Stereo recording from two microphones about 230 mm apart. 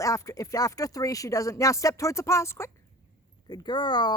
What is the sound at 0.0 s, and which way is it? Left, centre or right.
Speech, centre.